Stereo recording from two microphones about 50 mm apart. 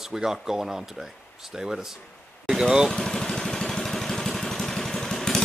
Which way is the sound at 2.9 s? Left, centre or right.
Centre.